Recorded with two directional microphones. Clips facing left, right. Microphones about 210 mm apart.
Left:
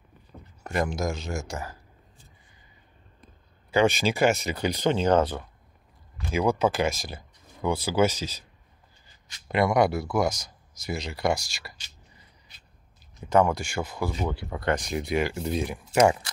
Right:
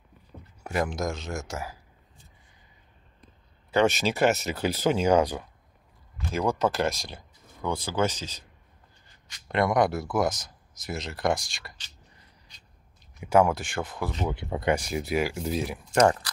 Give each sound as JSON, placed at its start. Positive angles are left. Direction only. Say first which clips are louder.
{"t": 0.7, "sound": "speech", "louder": "left 1 dB", "side_deg": 0}
{"t": 3.7, "sound": "speech", "louder": "left 1 dB", "side_deg": 0}
{"t": 6.6, "sound": "speech", "louder": "left 1 dB", "side_deg": 0}
{"t": 13.2, "sound": "speech", "louder": "even", "side_deg": -5}
{"t": 14.3, "sound": "speech", "louder": "right 2 dB", "side_deg": -20}
{"t": 14.7, "sound": "speech", "louder": "even", "side_deg": -5}